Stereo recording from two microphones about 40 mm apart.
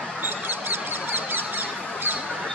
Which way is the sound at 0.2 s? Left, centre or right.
Right.